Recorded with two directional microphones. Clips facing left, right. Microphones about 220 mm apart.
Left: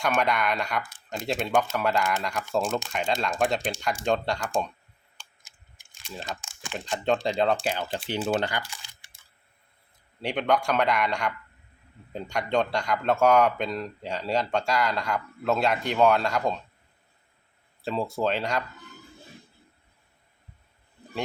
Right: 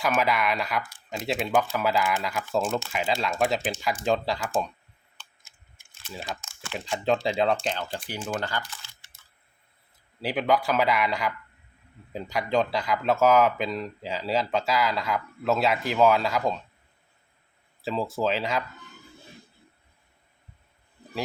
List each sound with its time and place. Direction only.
0.0 s speech: 5° right (ahead or behind)
6.4 s crumpling: 15° left (ahead or behind)
6.7 s speech: centre (ahead or behind)
7.5 s speech: 10° left (ahead or behind)
7.9 s speech: 25° left (ahead or behind)
10.2 s speech: 5° right (ahead or behind)
17.8 s speech: centre (ahead or behind)